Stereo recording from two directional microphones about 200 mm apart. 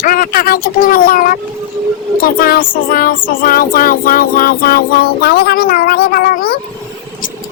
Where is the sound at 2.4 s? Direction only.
45° left (ahead or behind).